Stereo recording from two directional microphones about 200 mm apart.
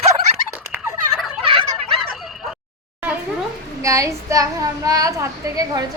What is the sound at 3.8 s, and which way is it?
A woman's voice, 15° right (ahead or behind).